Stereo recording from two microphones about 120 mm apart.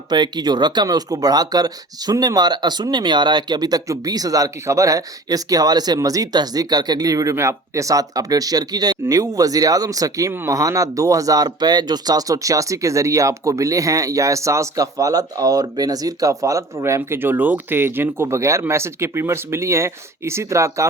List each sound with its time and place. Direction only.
0.1 s speech: 35° right (ahead or behind)